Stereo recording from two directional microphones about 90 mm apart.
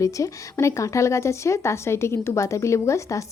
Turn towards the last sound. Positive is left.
turn(degrees=35)  # may be behind; listen again after turning